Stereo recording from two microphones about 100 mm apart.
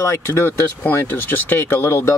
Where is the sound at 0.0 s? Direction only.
30° left (ahead or behind).